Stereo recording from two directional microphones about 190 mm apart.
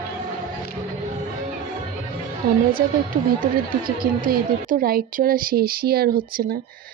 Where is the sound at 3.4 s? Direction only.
50° right (ahead or behind).